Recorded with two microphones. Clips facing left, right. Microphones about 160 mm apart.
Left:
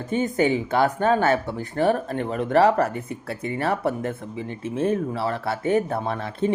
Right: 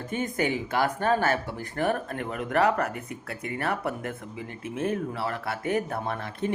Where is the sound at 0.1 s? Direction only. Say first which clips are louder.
Left 7 dB; 30° left (ahead or behind).